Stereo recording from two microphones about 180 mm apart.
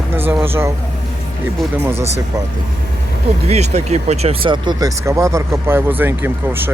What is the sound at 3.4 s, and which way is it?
Speech, 35° right (ahead or behind).